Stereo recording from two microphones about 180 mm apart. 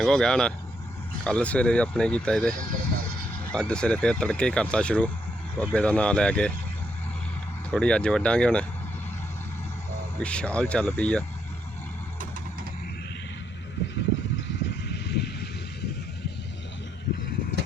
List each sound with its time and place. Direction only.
0.0 s speech: 5° left (ahead or behind)
7.7 s speech: 5° left (ahead or behind)
10.2 s speech: 5° left (ahead or behind)
13.8 s vehicle: 75° left (ahead or behind)
14.4 s a sound: 70° left (ahead or behind)